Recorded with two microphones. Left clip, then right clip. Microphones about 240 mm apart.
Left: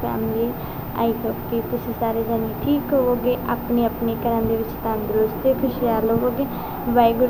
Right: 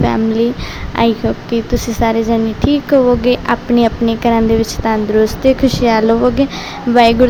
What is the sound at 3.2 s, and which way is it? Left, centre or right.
A woman's voice, right.